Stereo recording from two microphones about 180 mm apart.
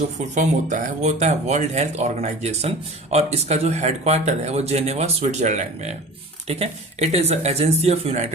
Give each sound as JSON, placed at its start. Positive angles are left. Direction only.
{"t": 0.3, "sound": "speech", "side_deg": -45}